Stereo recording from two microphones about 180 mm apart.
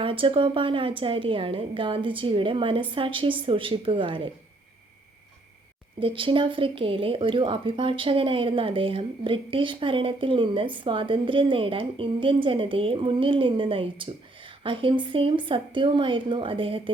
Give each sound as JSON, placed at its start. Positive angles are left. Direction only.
{"t": 0.0, "sound": "speech", "side_deg": -30}
{"t": 6.0, "sound": "speech", "side_deg": -30}